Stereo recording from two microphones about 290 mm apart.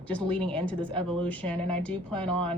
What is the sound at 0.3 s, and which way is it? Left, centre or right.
Speech, centre.